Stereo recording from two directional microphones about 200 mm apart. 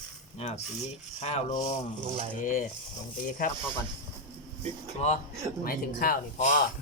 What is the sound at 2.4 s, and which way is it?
Speech, 40° left (ahead or behind).